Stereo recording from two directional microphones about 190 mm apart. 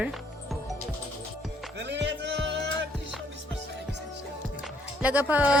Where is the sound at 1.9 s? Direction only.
65° right (ahead or behind).